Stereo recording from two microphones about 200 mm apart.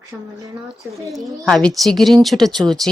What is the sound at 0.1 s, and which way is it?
Speech, 15° right (ahead or behind).